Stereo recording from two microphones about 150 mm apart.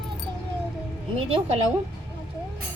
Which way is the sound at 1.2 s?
40° right (ahead or behind).